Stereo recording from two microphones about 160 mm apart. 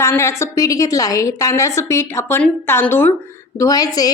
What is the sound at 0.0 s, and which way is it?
A woman's voice, 15° left (ahead or behind).